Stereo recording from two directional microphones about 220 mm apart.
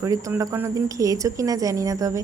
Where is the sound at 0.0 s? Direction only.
15° right (ahead or behind).